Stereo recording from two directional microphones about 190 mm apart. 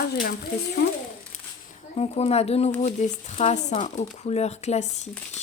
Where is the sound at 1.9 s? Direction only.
35° left (ahead or behind).